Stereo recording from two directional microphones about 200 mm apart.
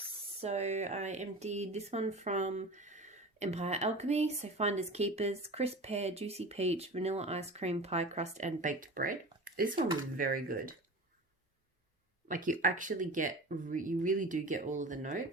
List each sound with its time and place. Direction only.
0.4 s speech: 35° right (ahead or behind)
12.3 s speech: 40° right (ahead or behind)